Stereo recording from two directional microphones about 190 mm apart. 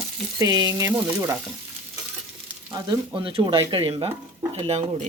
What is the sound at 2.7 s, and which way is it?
Speech, 25° right (ahead or behind).